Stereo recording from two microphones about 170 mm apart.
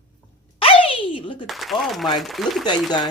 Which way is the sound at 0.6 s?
35° left (ahead or behind).